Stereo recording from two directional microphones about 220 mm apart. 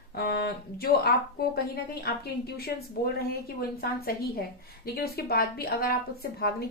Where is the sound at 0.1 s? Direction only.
45° left (ahead or behind).